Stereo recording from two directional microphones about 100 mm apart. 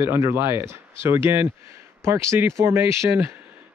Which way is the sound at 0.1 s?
20° right (ahead or behind).